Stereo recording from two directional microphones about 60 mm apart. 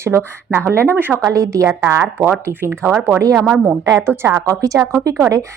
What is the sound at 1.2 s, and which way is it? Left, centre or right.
Speech, right.